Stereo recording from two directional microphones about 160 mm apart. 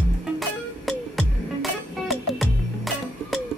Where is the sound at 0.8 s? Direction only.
Centre (ahead or behind).